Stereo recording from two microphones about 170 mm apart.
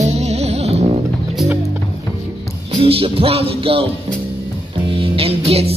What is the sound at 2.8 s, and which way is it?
Music, 35° right (ahead or behind).